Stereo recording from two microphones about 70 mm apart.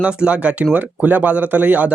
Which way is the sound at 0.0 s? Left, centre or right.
Centre.